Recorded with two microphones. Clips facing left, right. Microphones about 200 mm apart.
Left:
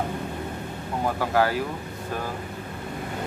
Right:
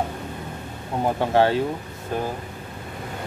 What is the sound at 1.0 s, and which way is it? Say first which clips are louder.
Speech: right 4 dB; 25° right (ahead or behind).